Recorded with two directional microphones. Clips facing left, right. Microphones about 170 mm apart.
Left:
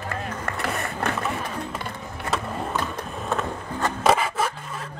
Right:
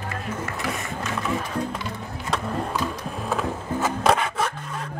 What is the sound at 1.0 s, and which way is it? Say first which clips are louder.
Skateboard: left 3 dB; 60° left (ahead or behind).